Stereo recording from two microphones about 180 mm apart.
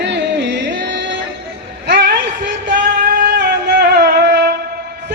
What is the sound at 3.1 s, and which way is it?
Music, 65° right (ahead or behind).